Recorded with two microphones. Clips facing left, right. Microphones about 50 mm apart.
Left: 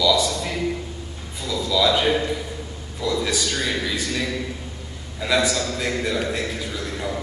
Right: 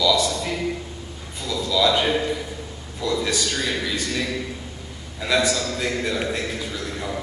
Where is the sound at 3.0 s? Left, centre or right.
Centre.